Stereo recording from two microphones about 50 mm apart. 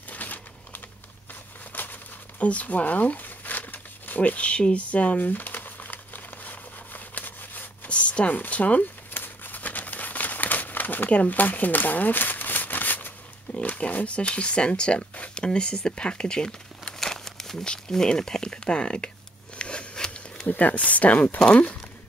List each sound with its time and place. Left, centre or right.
0.1 s typing: left
1.7 s a sound: left
7.9 s a sound: left
8.4 s speech: left
9.1 s crumpling: left
11.1 s shuffling cards: left
13.6 s speech: left
19.6 s a sound: left
20.4 s speech: left